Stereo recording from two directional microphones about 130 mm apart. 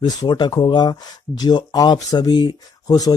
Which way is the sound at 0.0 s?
30° left (ahead or behind).